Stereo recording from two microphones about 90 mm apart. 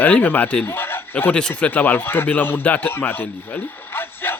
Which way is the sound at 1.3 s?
10° left (ahead or behind).